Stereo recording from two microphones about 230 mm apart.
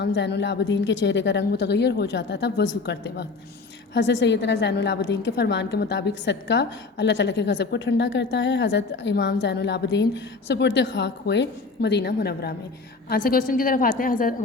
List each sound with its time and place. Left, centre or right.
0.0 s a woman's voice: left